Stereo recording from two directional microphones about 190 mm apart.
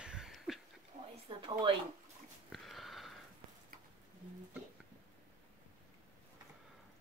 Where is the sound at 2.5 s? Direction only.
Centre (ahead or behind).